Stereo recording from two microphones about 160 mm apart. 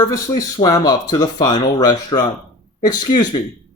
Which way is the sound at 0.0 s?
20° left (ahead or behind).